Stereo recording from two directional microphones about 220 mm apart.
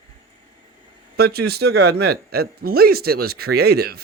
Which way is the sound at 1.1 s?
45° right (ahead or behind).